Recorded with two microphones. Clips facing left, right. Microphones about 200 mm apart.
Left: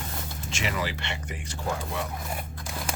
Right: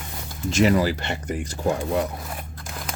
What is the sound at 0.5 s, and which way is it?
Speech, 40° right (ahead or behind).